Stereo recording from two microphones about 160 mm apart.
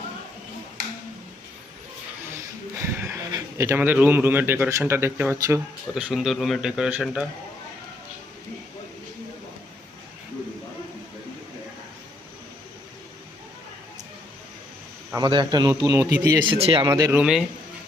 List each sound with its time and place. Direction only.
2.3 s speech: 15° right (ahead or behind)
5.9 s speech: 5° right (ahead or behind)
15.1 s a man's voice: 30° right (ahead or behind)
17.1 s a man's voice: 5° right (ahead or behind)